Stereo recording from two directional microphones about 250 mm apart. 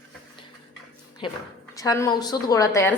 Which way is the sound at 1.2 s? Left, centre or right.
Centre.